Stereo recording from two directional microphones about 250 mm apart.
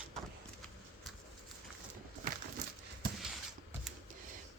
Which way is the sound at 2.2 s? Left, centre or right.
Right.